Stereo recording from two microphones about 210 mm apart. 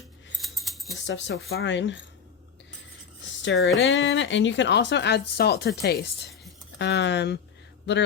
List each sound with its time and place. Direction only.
0.3 s keys jangling: centre (ahead or behind)
0.9 s speech: 60° left (ahead or behind)
1.5 s speech: 55° left (ahead or behind)
3.2 s a sound: 60° left (ahead or behind)
3.8 s speech: 60° left (ahead or behind)